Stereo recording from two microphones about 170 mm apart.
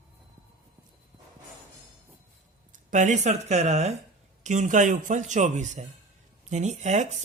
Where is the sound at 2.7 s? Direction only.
45° right (ahead or behind).